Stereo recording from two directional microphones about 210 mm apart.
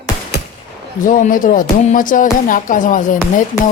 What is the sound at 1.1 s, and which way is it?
Speech, 40° left (ahead or behind).